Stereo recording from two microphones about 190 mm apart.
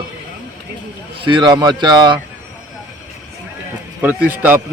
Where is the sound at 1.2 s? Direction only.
25° right (ahead or behind).